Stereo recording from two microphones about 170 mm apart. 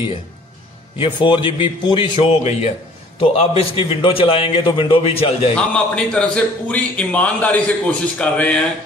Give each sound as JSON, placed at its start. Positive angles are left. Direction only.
{"t": 0.9, "sound": "a man's voice", "side_deg": 30}
{"t": 5.6, "sound": "a man's voice", "side_deg": 5}